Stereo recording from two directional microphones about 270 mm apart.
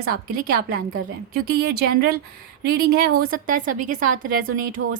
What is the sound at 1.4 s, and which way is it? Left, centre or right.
A woman's voice, right.